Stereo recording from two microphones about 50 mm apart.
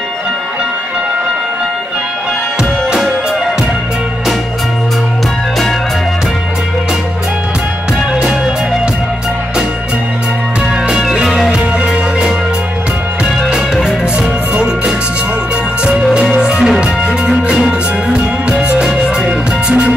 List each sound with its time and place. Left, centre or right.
11.2 s music: centre
13.2 s music: centre